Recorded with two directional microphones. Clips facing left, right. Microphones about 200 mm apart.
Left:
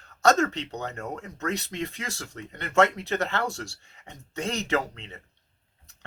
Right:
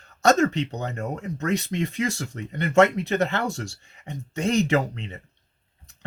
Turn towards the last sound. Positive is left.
turn(degrees=-10)  # may be behind; listen again after turning